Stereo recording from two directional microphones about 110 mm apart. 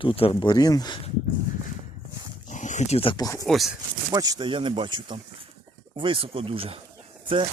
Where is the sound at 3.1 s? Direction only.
35° left (ahead or behind).